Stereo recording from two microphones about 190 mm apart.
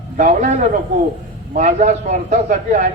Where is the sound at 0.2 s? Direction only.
40° right (ahead or behind).